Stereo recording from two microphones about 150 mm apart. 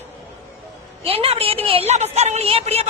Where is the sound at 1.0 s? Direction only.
40° right (ahead or behind).